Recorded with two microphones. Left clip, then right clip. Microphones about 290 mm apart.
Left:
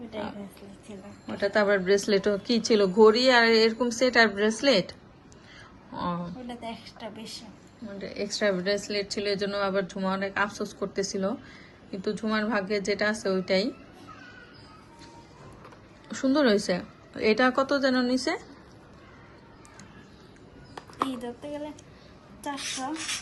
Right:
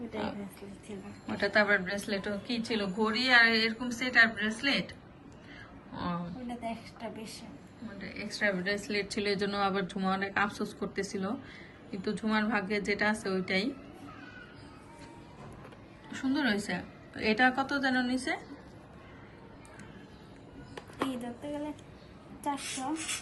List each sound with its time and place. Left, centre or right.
1.3 s a woman's voice: centre
16.1 s speech: centre
20.7 s speech: centre